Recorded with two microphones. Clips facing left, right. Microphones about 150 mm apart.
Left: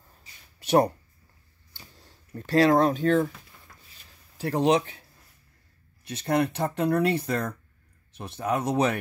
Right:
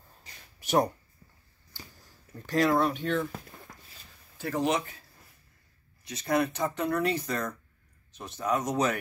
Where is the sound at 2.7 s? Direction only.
40° left (ahead or behind).